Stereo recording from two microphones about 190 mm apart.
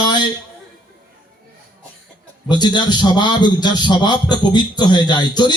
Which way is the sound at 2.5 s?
20° left (ahead or behind).